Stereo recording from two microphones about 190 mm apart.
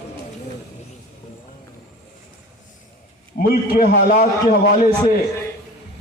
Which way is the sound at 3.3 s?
45° left (ahead or behind).